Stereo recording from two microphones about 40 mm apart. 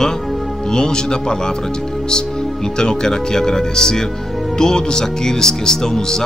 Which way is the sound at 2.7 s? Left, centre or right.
Centre.